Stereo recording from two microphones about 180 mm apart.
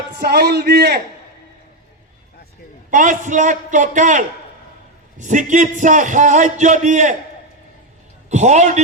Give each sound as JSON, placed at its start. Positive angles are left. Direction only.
{"t": 0.2, "sound": "a man's voice", "side_deg": -65}
{"t": 2.9, "sound": "a man's voice", "side_deg": -45}
{"t": 8.3, "sound": "a man's voice", "side_deg": -40}